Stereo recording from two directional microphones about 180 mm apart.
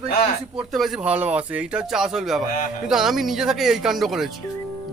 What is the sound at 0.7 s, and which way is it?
Speech, centre (ahead or behind).